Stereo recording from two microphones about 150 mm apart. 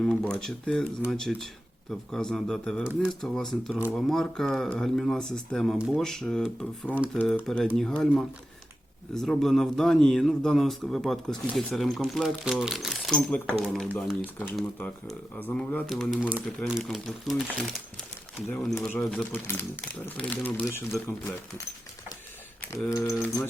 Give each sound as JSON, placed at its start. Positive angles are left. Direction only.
{"t": 0.0, "sound": "speech", "side_deg": 5}
{"t": 2.8, "sound": "speech", "side_deg": -10}
{"t": 3.1, "sound": "speech", "side_deg": 5}
{"t": 15.9, "sound": "speech", "side_deg": 0}
{"t": 22.7, "sound": "speech", "side_deg": 25}